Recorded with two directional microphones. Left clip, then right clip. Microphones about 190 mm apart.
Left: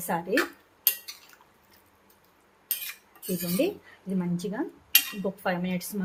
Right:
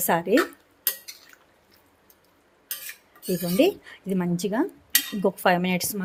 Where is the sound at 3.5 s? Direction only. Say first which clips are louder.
Right 7 dB; 30° right (ahead or behind).